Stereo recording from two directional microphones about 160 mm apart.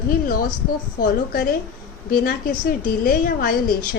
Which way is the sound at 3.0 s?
65° left (ahead or behind).